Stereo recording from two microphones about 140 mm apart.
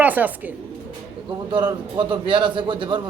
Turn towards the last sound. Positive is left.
turn(degrees=-35)  # may be behind; listen again after turning